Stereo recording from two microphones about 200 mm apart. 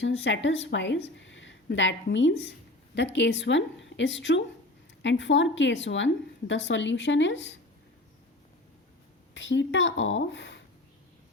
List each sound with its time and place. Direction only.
0.0 s a woman's voice: 65° left (ahead or behind)
9.3 s speech: 65° left (ahead or behind)